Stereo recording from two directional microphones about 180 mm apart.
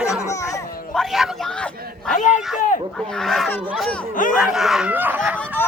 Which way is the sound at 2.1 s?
45° left (ahead or behind).